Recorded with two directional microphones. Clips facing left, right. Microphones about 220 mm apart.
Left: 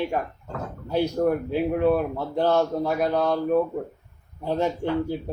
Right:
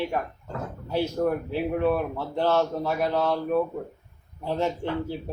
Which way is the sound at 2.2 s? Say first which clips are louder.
Left 2 dB; 15° left (ahead or behind).